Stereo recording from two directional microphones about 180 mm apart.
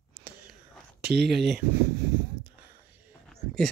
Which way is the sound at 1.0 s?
65° right (ahead or behind).